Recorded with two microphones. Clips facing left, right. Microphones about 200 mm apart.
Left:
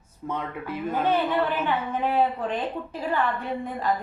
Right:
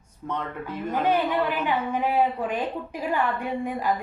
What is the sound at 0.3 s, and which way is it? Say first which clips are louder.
Speech: even; 10° left (ahead or behind).